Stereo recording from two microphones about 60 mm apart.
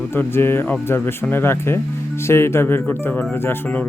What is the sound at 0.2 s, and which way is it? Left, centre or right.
Speech, left.